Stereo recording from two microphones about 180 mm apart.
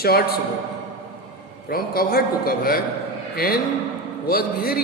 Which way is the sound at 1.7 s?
55° left (ahead or behind).